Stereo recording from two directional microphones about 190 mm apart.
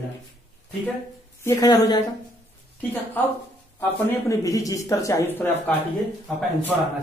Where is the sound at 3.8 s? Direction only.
15° left (ahead or behind).